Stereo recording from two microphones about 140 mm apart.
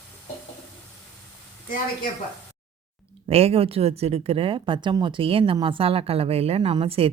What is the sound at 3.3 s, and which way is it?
A woman's voice, 45° right (ahead or behind).